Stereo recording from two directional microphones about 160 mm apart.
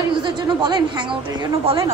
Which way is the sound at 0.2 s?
30° right (ahead or behind).